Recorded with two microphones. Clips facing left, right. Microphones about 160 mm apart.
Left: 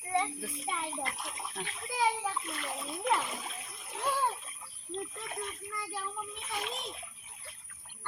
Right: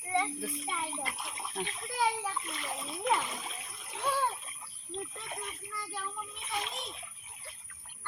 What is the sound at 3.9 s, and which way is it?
Splash, centre (ahead or behind).